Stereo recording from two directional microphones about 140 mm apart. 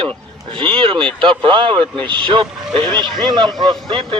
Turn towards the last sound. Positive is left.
turn(degrees=-40)  # may be behind; listen again after turning